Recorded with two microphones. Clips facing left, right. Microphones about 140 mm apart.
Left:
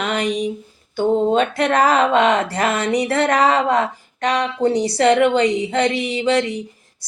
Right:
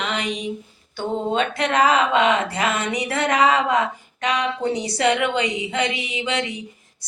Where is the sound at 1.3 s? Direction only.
45° left (ahead or behind).